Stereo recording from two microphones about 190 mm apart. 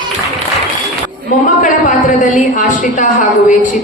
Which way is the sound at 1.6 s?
40° left (ahead or behind).